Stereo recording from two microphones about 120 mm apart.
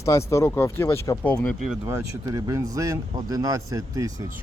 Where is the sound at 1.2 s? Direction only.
10° left (ahead or behind).